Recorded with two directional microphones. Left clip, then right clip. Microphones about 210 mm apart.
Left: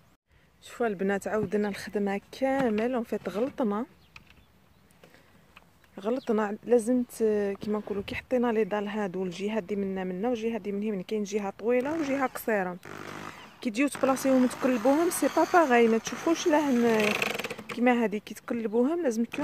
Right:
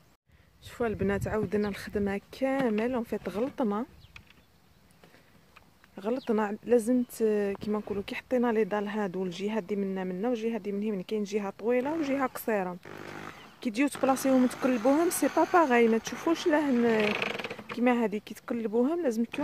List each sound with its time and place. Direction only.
0.7 s speech: centre (ahead or behind)
5.9 s speech: 5° left (ahead or behind)
12.8 s speech: 40° left (ahead or behind)
13.6 s speech: centre (ahead or behind)
14.7 s speech: 35° left (ahead or behind)
15.5 s speech: 5° left (ahead or behind)
17.0 s a sound: 40° left (ahead or behind)
17.7 s speech: 5° left (ahead or behind)